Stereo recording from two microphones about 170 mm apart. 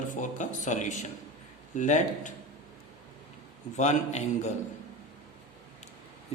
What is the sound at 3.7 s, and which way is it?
Speech, 45° left (ahead or behind).